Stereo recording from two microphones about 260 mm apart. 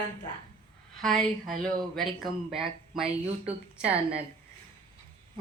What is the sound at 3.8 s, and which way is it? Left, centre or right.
Speech, right.